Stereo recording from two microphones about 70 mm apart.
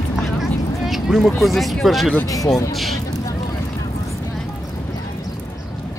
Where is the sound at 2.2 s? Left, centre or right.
Left.